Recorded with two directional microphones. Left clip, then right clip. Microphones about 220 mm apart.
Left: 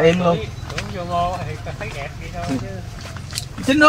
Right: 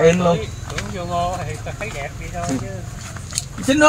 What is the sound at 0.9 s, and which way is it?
Speech, 45° right (ahead or behind).